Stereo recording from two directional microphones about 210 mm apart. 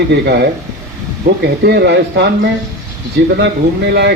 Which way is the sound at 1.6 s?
50° right (ahead or behind).